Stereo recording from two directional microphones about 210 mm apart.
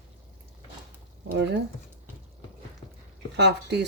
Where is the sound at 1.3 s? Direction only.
55° right (ahead or behind).